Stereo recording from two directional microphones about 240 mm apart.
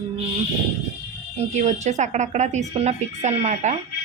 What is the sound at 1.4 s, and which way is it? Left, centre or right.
Speech, right.